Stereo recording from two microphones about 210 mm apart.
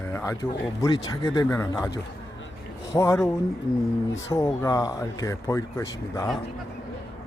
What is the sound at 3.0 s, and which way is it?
Speech, 15° left (ahead or behind).